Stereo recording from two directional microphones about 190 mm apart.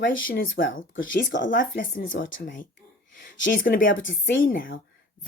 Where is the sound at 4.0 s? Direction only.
75° left (ahead or behind).